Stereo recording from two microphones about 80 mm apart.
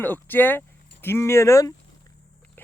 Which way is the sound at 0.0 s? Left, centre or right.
Left.